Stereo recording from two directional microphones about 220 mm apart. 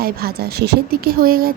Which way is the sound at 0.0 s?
45° right (ahead or behind).